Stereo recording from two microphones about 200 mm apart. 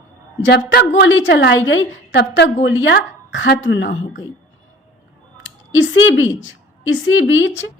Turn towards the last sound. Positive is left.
turn(degrees=65)  # may be behind; listen again after turning